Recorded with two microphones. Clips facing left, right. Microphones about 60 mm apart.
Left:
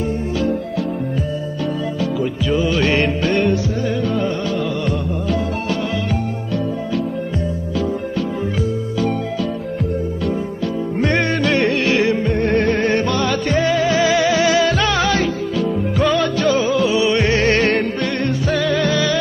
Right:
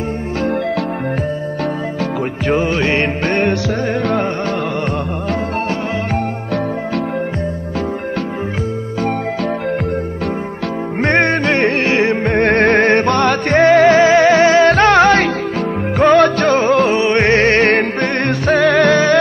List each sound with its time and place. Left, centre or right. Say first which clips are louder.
2.4 s music: right 4 dB; right
2.7 s music: right 1 dB; right
3.3 s music: right 2 dB; right
11.0 s music: right 4 dB; right
12.3 s music: right 5 dB; right